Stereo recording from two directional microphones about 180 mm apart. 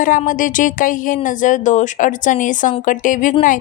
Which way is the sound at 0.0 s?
50° left (ahead or behind).